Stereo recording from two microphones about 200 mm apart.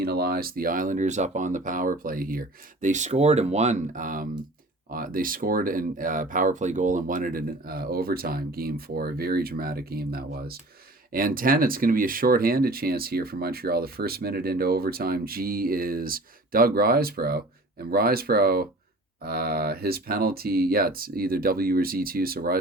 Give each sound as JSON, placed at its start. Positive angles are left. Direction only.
{"t": 0.0, "sound": "speech", "side_deg": -50}